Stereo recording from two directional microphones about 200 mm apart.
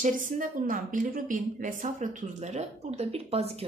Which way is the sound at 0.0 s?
40° right (ahead or behind).